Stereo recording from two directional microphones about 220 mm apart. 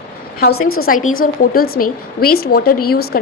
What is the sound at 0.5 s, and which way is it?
Speech, 75° left (ahead or behind).